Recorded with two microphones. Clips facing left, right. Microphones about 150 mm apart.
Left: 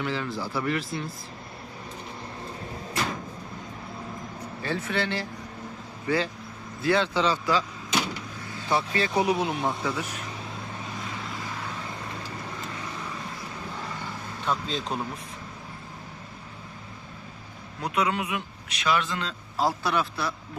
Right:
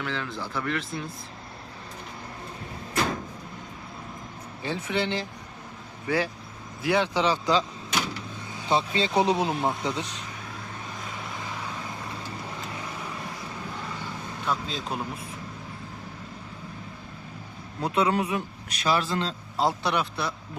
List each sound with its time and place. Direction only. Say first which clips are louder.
0.0 s speech: left 2 dB; 5° left (ahead or behind)
4.6 s a man's voice: right 1 dB; 15° right (ahead or behind)
14.4 s speech: left 1 dB; centre (ahead or behind)
17.8 s a man's voice: right 3 dB; 30° right (ahead or behind)
19.5 s speech: even; 20° right (ahead or behind)